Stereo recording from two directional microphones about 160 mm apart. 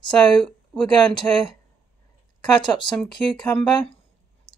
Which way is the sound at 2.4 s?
30° left (ahead or behind).